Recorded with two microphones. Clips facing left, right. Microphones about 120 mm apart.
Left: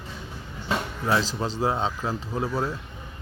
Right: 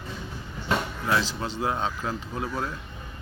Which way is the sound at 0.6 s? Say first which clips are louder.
Even; 30° left (ahead or behind).